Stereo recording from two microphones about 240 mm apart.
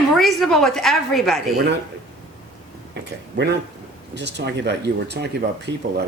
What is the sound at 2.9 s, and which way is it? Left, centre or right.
Speech, right.